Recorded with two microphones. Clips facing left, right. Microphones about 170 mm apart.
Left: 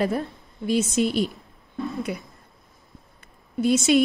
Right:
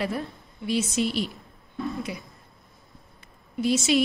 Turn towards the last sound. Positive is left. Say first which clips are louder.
# left 4 dB
turn(degrees=50)  # may be behind; listen again after turning